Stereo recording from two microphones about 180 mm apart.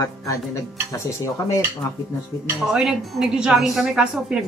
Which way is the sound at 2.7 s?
5° right (ahead or behind).